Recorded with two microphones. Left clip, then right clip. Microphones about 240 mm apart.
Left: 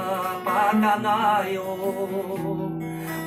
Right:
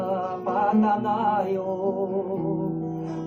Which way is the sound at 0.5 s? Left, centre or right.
Left.